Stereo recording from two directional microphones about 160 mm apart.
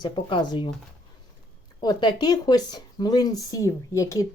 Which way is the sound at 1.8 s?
25° left (ahead or behind).